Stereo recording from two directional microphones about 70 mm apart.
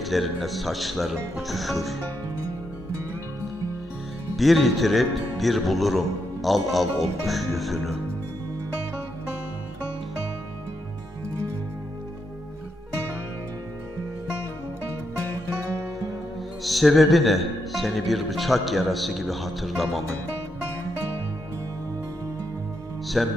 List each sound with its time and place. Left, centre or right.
0.0 s speech: centre
4.4 s speech: centre
16.6 s speech: centre
23.2 s speech: centre